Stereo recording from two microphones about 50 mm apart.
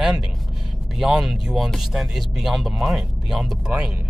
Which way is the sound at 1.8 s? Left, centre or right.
Centre.